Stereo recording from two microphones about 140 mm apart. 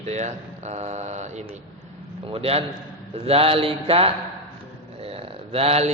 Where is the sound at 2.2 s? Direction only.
45° right (ahead or behind).